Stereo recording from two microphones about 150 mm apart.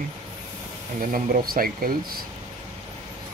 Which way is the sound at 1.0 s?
65° right (ahead or behind).